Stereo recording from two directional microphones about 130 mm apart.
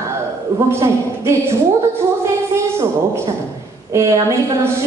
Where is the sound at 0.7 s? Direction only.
20° right (ahead or behind).